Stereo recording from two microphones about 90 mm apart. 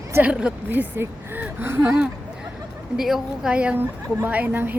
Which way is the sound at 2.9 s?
5° right (ahead or behind).